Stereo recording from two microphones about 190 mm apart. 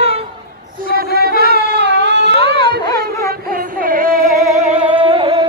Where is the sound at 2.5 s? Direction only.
60° right (ahead or behind).